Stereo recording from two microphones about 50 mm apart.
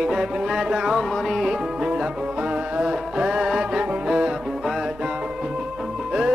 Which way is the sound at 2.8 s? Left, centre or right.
Centre.